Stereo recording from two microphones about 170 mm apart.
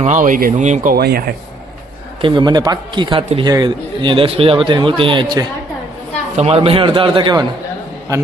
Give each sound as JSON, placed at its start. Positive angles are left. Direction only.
{"t": 0.0, "sound": "speech", "side_deg": -50}
{"t": 0.9, "sound": "speech", "side_deg": -70}
{"t": 2.2, "sound": "a man's voice", "side_deg": -25}
{"t": 6.3, "sound": "a man's voice", "side_deg": -40}